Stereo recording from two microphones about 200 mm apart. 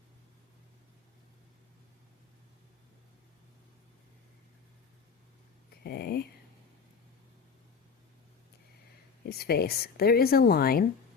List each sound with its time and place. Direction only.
5.8 s speech: 55° left (ahead or behind)
9.4 s speech: 50° left (ahead or behind)